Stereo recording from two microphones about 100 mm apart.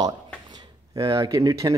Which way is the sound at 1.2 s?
35° right (ahead or behind).